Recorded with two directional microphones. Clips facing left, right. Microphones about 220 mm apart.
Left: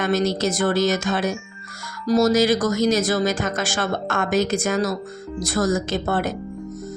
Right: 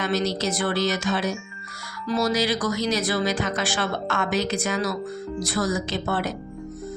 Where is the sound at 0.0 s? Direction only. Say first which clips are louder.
Left 4 dB; 50° left (ahead or behind).